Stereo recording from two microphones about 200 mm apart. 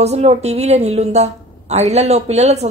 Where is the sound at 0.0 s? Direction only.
30° right (ahead or behind).